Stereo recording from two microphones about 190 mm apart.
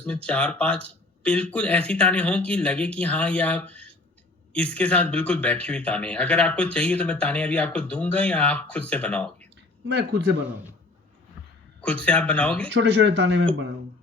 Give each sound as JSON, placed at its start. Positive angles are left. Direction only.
{"t": 0.0, "sound": "speech", "side_deg": 5}
{"t": 9.8, "sound": "speech", "side_deg": -60}
{"t": 11.8, "sound": "speech", "side_deg": 5}
{"t": 12.7, "sound": "speech", "side_deg": -70}